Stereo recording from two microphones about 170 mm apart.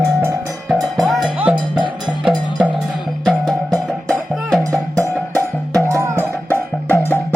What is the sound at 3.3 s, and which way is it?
Music, centre (ahead or behind).